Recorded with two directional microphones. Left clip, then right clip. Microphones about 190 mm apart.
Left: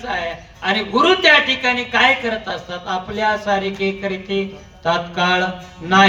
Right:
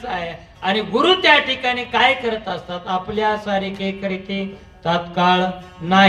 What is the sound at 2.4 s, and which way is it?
Mantra, 55° right (ahead or behind).